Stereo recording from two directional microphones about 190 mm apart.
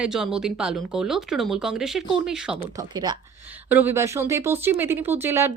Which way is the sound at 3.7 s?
10° right (ahead or behind).